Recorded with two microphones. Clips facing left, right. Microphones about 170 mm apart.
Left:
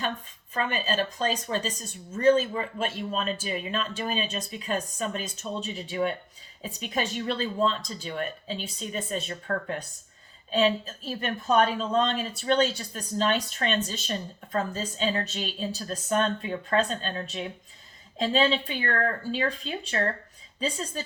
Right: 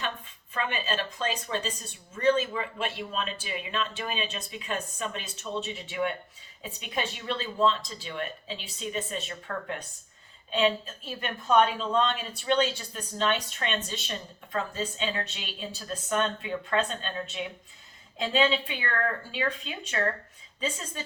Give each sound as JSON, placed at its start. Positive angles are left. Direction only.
{"t": 0.5, "sound": "speech", "side_deg": 40}